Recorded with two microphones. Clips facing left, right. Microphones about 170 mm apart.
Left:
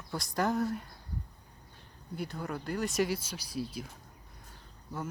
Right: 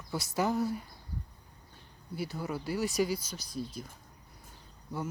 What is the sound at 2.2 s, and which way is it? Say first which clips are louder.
Speech: right 1 dB; 5° right (ahead or behind).